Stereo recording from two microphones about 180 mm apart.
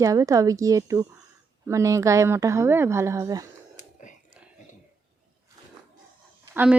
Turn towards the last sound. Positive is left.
turn(degrees=-10)  # may be behind; listen again after turning